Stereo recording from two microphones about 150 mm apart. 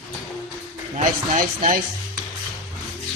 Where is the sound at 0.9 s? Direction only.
60° right (ahead or behind).